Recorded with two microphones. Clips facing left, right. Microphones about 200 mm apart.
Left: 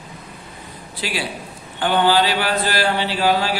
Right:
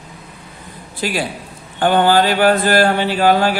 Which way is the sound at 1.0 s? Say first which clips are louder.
Right 5 dB; 45° right (ahead or behind).